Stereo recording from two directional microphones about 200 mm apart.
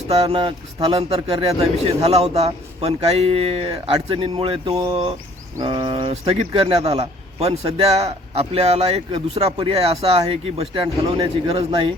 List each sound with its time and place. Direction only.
0.1 s a man's voice: 30° right (ahead or behind)